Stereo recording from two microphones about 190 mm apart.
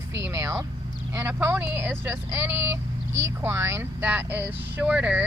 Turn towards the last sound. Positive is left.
turn(degrees=-5)  # may be behind; listen again after turning